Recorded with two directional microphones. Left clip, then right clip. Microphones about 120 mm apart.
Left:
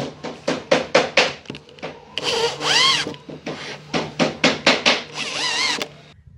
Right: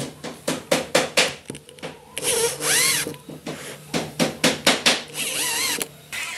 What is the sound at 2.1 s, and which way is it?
Tools, centre (ahead or behind).